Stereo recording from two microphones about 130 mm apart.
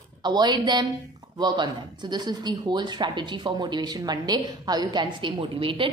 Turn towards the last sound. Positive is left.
turn(degrees=-40)  # may be behind; listen again after turning